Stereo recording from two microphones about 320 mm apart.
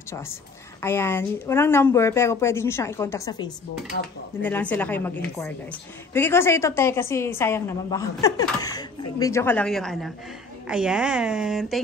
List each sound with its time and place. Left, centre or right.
0.8 s a woman's voice: centre
3.9 s speech: left
4.4 s a woman's voice: centre